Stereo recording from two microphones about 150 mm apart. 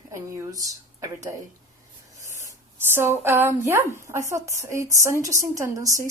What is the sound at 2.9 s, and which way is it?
A woman's voice, 15° right (ahead or behind).